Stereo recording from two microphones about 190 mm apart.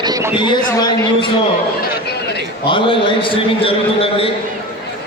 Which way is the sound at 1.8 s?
60° left (ahead or behind).